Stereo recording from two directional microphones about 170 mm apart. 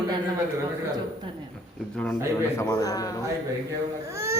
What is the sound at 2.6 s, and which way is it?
Speech, 20° left (ahead or behind).